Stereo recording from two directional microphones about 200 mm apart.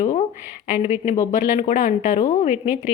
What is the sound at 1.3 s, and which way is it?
A woman's voice, 35° left (ahead or behind).